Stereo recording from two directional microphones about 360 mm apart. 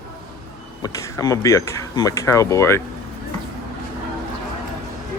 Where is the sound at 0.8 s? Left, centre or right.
Centre.